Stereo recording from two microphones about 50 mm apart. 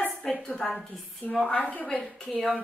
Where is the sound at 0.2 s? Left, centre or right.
Centre.